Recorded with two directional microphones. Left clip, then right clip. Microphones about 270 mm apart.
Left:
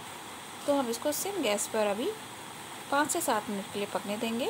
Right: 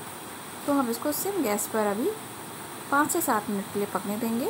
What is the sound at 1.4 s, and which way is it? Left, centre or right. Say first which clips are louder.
Speech: even; centre.